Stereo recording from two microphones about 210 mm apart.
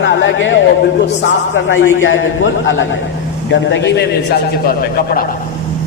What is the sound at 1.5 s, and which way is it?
A man's voice, 65° left (ahead or behind).